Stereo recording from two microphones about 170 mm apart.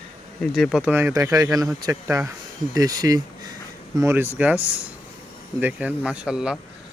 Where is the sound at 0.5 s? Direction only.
Centre (ahead or behind).